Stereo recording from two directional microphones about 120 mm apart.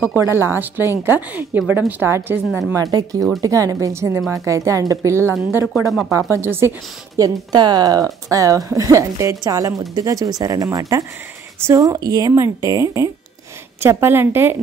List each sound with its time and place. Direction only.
0.0 s speech: 20° right (ahead or behind)
2.7 s speech: 30° right (ahead or behind)
5.7 s speech: centre (ahead or behind)
6.1 s speech: 20° right (ahead or behind)
7.2 s speech: 35° right (ahead or behind)